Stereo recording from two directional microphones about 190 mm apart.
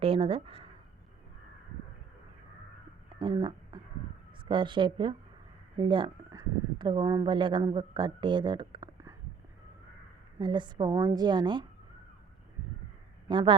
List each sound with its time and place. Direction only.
0.0 s speech: 30° right (ahead or behind)
3.2 s a sound: 25° right (ahead or behind)
4.4 s a woman's voice: 25° right (ahead or behind)
10.3 s a woman's voice: 25° right (ahead or behind)
13.2 s a man's voice: 25° right (ahead or behind)